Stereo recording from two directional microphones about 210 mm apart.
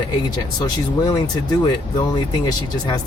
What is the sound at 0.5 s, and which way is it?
Speech, 20° left (ahead or behind).